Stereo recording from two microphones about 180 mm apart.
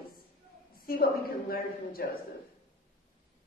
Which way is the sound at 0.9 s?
55° left (ahead or behind).